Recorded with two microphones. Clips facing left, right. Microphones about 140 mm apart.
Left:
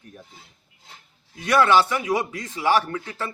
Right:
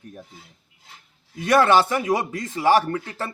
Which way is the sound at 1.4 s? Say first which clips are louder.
Right 1 dB; 45° right (ahead or behind).